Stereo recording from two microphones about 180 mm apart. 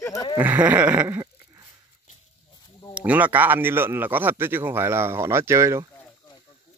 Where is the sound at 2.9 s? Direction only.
10° right (ahead or behind).